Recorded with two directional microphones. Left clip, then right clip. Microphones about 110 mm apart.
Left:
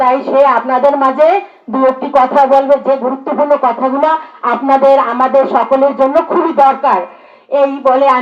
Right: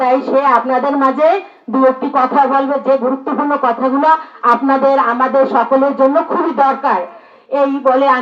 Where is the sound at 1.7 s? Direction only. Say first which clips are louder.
Left 1 dB; 30° left (ahead or behind).